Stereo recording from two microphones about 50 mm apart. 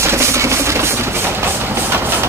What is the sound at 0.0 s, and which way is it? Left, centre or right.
Chopping, right.